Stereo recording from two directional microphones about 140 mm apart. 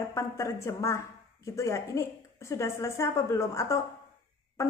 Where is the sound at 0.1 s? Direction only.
20° left (ahead or behind).